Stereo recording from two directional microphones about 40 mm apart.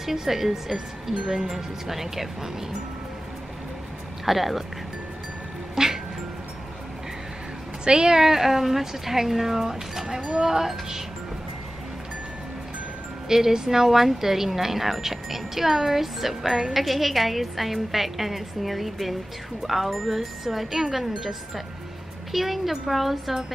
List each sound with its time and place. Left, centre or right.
0.0 s speech: centre
4.3 s speech: centre
5.8 s music: centre
7.8 s a woman's voice: right
8.2 s speech: centre
10.2 s a woman's voice: right
10.5 s speech: centre
13.3 s speech: centre